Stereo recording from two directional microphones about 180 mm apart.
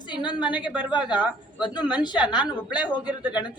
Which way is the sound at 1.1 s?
25° left (ahead or behind).